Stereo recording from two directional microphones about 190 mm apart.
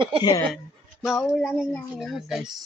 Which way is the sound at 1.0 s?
Centre (ahead or behind).